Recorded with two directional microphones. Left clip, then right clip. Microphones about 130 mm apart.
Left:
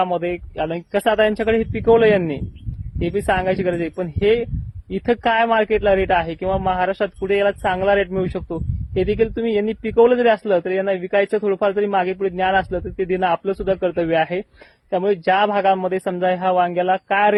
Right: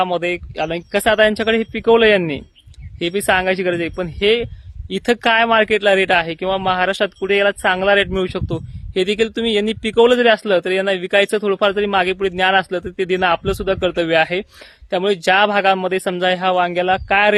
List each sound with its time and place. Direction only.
0.0 s a man's voice: 45° right (ahead or behind)